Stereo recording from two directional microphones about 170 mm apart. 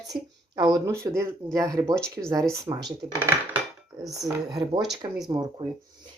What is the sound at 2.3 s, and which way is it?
Speech, 20° right (ahead or behind).